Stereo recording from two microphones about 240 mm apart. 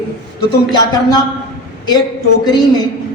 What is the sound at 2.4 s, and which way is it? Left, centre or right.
Speech, centre.